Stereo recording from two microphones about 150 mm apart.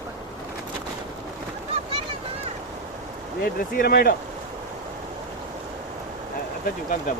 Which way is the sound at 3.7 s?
80° left.